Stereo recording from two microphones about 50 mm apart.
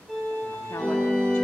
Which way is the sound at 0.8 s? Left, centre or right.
Centre.